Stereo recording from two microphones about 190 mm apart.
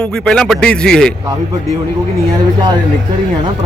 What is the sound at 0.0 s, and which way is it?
A man's voice, 5° left (ahead or behind).